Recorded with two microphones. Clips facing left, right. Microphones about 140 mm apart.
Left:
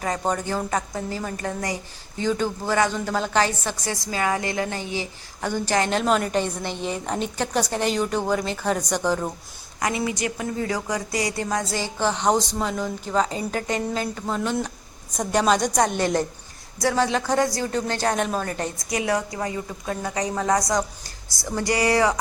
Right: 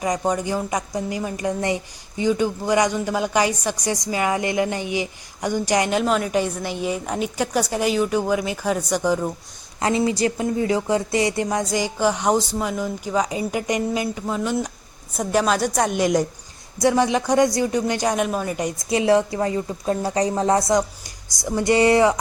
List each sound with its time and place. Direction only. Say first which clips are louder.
0.0 s speech: right 3 dB; 10° right (ahead or behind)
9.8 s a woman's voice: right 5 dB; 25° right (ahead or behind); by 18.7 s 10° right (ahead or behind)
18.8 s a woman's voice: right 8 dB; 25° right (ahead or behind)